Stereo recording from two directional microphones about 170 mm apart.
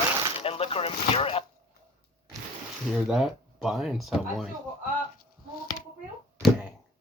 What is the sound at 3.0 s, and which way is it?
Speech, centre (ahead or behind).